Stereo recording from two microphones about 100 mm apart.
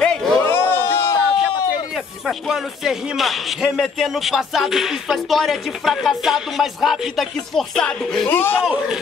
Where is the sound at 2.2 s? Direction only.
5° right (ahead or behind).